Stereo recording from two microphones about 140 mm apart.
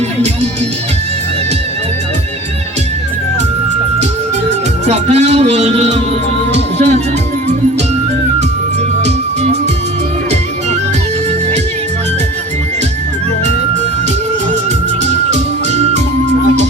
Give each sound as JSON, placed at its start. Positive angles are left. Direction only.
{"t": 4.9, "sound": "speech", "side_deg": -50}
{"t": 6.5, "sound": "music", "side_deg": -50}
{"t": 9.0, "sound": "music", "side_deg": -50}
{"t": 15.0, "sound": "music", "side_deg": -55}